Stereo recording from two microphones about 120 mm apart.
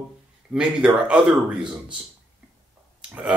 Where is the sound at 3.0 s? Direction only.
10° right (ahead or behind).